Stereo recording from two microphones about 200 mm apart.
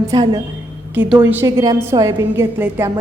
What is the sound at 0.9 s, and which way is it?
A woman's voice, 10° right (ahead or behind).